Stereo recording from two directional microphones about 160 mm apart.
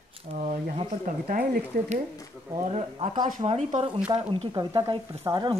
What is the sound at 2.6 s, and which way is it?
Speech, 40° right (ahead or behind).